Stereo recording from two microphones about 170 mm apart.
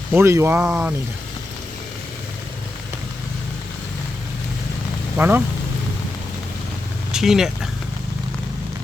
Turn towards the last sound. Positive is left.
turn(degrees=0)  # may be behind; listen again after turning